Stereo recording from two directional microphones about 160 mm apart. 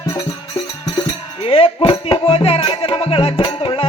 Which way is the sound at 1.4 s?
35° left (ahead or behind).